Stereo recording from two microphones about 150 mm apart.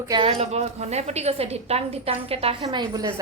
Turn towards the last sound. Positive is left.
turn(degrees=-30)  # may be behind; listen again after turning